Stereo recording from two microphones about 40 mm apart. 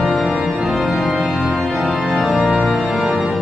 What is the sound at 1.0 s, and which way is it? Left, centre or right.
Music, centre.